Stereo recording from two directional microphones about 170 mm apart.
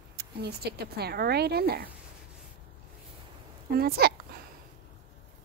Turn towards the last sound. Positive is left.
turn(degrees=-70)  # may be behind; listen again after turning